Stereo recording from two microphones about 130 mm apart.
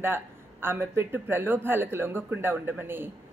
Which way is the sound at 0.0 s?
15° right (ahead or behind).